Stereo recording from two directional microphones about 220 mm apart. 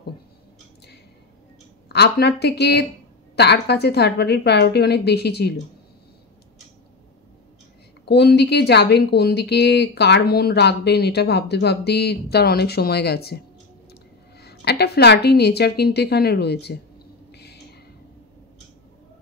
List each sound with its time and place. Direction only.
1.9 s a woman's voice: 50° left (ahead or behind)
8.0 s a woman's voice: 50° left (ahead or behind)
14.4 s a woman's voice: 50° left (ahead or behind)
17.3 s a sound: 50° left (ahead or behind)